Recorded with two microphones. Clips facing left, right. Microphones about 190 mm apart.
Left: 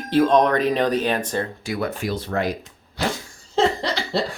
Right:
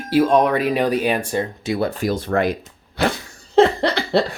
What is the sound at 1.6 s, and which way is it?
Speech, 25° right (ahead or behind).